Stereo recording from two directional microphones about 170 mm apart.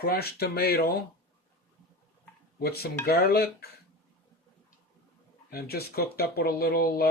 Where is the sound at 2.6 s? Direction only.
70° left (ahead or behind).